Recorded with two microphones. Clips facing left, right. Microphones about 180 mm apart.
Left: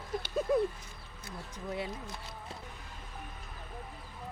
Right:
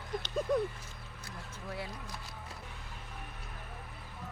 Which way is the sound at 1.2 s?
20° left (ahead or behind).